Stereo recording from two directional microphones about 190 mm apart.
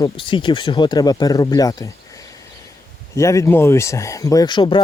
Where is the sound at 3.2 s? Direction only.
15° left (ahead or behind).